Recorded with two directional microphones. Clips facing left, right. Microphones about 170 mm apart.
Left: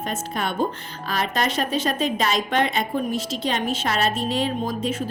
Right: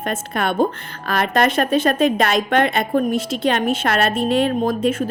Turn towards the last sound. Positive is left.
turn(degrees=-55)  # may be behind; listen again after turning